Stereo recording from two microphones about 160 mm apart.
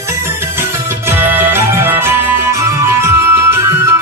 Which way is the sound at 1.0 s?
15° right (ahead or behind).